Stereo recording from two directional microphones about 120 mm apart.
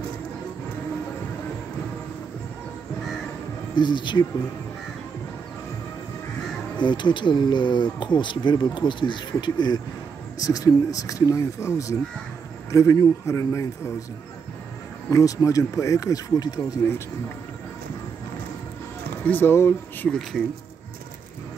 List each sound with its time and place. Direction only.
3.7 s speech: 40° left (ahead or behind)
6.8 s speech: 40° left (ahead or behind); by 14.0 s 25° left (ahead or behind)
15.0 s speech: 25° left (ahead or behind)
19.2 s speech: 15° left (ahead or behind)
20.1 s speech: 5° left (ahead or behind)